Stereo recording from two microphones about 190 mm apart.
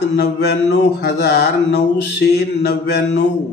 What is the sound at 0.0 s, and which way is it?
A man's voice, 60° left (ahead or behind).